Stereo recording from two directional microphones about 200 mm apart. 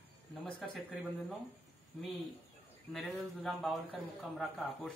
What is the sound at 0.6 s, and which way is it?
Speech, centre (ahead or behind).